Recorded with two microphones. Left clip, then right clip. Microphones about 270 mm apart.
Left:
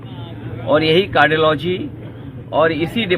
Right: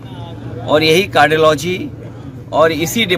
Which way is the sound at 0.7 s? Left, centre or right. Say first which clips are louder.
Right 2 dB; right.